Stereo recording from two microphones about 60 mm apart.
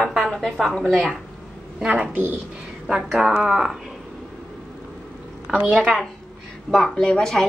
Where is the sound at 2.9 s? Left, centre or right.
Centre.